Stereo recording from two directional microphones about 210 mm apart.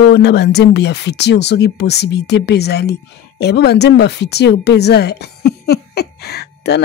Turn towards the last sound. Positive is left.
turn(degrees=50)  # may be behind; listen again after turning